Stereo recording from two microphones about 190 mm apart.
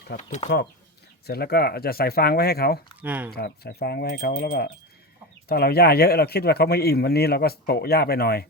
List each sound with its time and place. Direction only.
0.2 s speech: 40° left (ahead or behind)
1.3 s speech: 55° left (ahead or behind)
3.0 s speech: 10° right (ahead or behind)
3.3 s speech: 55° left (ahead or behind)